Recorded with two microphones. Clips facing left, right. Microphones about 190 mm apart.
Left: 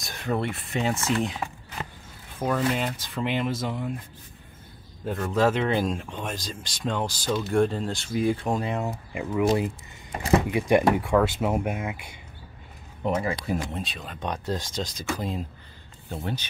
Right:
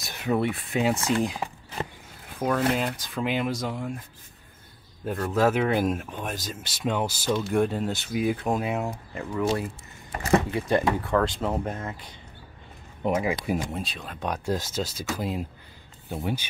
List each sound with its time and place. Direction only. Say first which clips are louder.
0.0 s speech: right 3 dB; 5° right (ahead or behind)
2.3 s speech: right 1 dB; centre (ahead or behind)
5.0 s speech: even; 5° right (ahead or behind)
8.9 s speech: left 3 dB; 10° left (ahead or behind)
13.0 s speech: right 1 dB; 10° right (ahead or behind)
13.6 s speech: right 1 dB; centre (ahead or behind)